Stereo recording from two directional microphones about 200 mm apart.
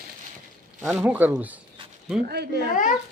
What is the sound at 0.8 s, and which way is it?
Speech, 5° right (ahead or behind).